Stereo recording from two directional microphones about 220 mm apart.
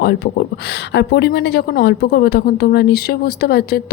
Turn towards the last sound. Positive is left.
turn(degrees=45)  # may be behind; listen again after turning